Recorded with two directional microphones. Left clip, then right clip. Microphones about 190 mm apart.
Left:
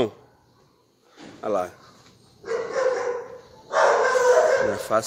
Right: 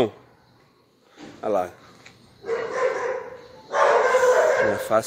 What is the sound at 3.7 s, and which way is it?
Bow-wow, 15° left (ahead or behind).